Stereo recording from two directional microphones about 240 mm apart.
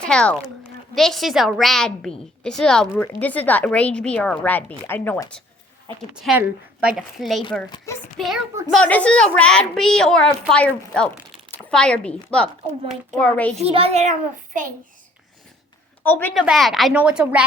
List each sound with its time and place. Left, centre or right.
0.0 s a woman's voice: centre
6.2 s a woman's voice: centre
7.9 s a woman's voice: centre
13.6 s a child's voice: right
16.0 s a woman's voice: centre